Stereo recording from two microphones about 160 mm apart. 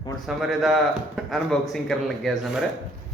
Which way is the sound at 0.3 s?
Centre (ahead or behind).